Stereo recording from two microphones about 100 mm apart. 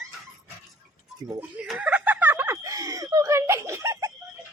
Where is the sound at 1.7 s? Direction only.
15° right (ahead or behind); by 4.1 s 30° right (ahead or behind).